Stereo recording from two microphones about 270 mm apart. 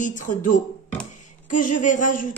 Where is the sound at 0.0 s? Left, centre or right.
Left.